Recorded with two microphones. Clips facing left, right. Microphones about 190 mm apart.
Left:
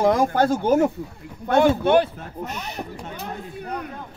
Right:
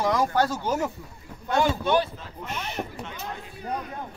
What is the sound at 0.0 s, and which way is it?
Speech, 50° left (ahead or behind).